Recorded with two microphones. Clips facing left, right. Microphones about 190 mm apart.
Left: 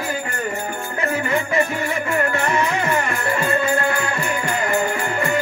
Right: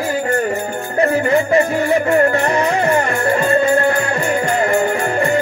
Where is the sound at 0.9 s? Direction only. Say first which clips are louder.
Right 8 dB; 35° right (ahead or behind).